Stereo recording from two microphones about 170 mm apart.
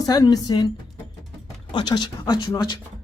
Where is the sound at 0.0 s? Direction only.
20° left (ahead or behind).